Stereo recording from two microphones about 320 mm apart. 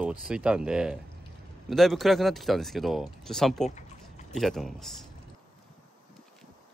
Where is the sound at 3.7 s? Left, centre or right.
Left.